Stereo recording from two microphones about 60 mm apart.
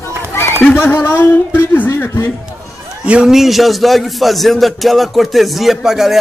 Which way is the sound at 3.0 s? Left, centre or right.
Centre.